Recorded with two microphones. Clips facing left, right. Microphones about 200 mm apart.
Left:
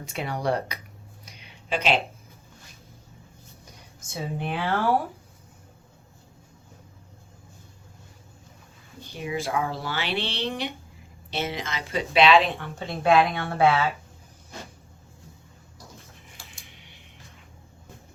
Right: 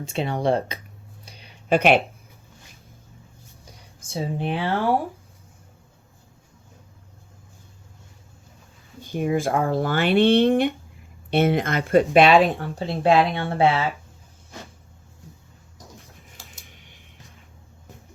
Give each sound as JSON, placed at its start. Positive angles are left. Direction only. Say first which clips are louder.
{"t": 0.0, "sound": "speech", "louder": "right 5 dB", "side_deg": -25}
{"t": 1.2, "sound": "a sound", "louder": "right 4 dB", "side_deg": -35}
{"t": 1.7, "sound": "speech", "louder": "right 7 dB", "side_deg": -60}
{"t": 4.1, "sound": "speech", "louder": "right 4 dB", "side_deg": -30}
{"t": 9.0, "sound": "speech", "louder": "right 7 dB", "side_deg": -50}
{"t": 12.5, "sound": "speech", "louder": "right 5 dB", "side_deg": -35}
{"t": 16.6, "sound": "a sound", "louder": "right 1 dB", "side_deg": -50}